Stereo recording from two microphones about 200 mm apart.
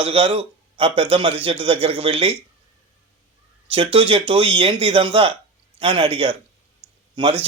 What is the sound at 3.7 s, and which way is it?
A man's voice, 30° right (ahead or behind).